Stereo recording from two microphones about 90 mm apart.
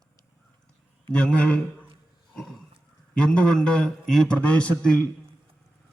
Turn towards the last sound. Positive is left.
turn(degrees=10)  # may be behind; listen again after turning